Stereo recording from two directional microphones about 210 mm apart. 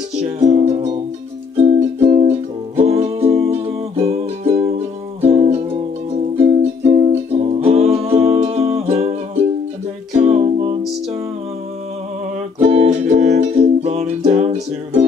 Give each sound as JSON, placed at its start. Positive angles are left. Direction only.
{"t": 0.2, "sound": "music", "side_deg": -30}
{"t": 12.5, "sound": "music", "side_deg": -30}